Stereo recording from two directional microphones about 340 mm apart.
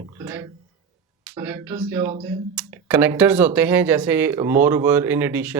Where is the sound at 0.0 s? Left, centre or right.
Centre.